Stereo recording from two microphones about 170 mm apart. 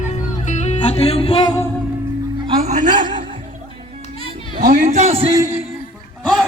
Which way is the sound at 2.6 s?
45° right (ahead or behind).